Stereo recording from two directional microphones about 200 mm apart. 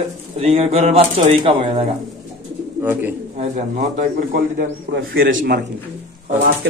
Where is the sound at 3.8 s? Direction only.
45° right (ahead or behind).